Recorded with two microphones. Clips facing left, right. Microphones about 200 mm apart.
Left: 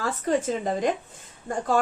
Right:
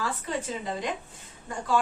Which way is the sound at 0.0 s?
45° left (ahead or behind).